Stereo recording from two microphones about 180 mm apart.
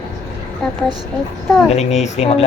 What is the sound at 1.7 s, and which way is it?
Speech, 40° left (ahead or behind).